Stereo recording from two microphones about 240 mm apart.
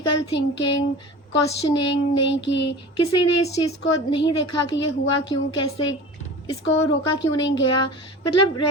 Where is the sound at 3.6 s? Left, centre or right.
Centre.